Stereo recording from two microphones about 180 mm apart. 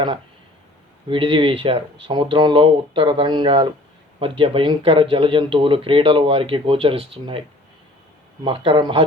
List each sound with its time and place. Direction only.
1.0 s speech: 30° right (ahead or behind)
8.4 s speech: 30° right (ahead or behind)